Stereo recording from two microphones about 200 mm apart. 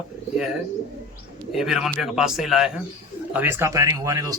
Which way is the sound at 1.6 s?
Centre (ahead or behind).